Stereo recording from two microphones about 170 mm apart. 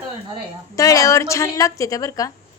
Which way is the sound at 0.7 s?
20° left (ahead or behind).